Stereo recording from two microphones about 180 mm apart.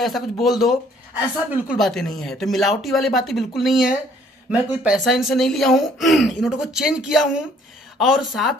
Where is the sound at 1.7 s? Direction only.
Centre (ahead or behind).